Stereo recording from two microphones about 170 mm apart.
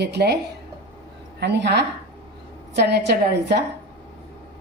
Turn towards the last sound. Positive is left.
turn(degrees=-80)